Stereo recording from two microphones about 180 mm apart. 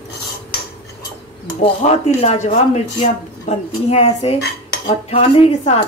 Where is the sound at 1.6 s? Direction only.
35° left (ahead or behind).